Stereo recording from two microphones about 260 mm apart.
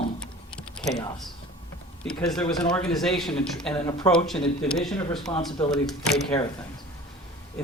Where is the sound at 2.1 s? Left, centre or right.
Centre.